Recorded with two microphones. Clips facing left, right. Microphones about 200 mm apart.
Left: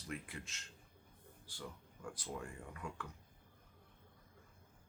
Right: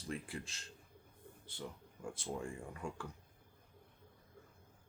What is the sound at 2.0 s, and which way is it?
Speech, 25° right (ahead or behind).